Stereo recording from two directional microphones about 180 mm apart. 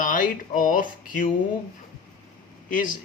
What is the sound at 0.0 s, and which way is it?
Speech, 45° left (ahead or behind).